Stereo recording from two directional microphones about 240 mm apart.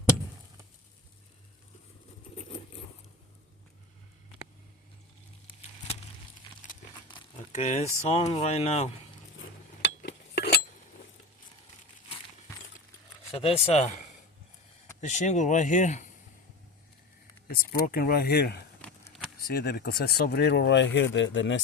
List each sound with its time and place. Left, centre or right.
7.1 s crumpling: centre
7.5 s speech: left
9.8 s chink: left
13.3 s speech: left
15.0 s speech: left
17.7 s speech: left
18.8 s a sound: centre
19.5 s speech: left